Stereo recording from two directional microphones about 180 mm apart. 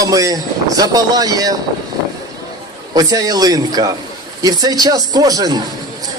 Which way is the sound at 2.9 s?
20° right (ahead or behind).